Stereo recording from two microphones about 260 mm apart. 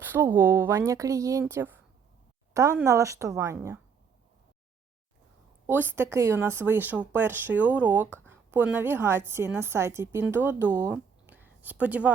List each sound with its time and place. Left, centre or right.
0.0 s speech: centre
5.6 s speech: centre